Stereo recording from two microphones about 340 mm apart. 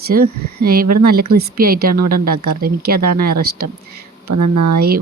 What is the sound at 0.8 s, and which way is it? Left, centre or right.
Speech, right.